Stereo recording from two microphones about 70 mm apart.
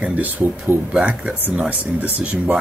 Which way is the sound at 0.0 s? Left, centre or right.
Right.